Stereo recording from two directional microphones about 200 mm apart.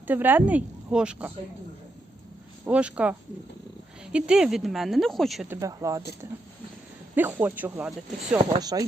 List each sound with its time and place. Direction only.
0.1 s speech: 10° right (ahead or behind)
2.6 s speech: 5° right (ahead or behind)
5.5 s speech: 15° right (ahead or behind)
7.2 s speech: 10° right (ahead or behind)
8.6 s speech: 20° right (ahead or behind)